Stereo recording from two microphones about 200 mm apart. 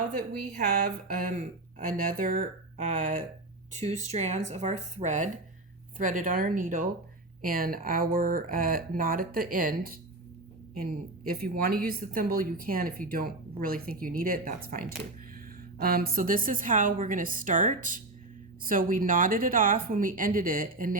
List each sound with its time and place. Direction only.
0.2 s a woman's voice: 50° right (ahead or behind)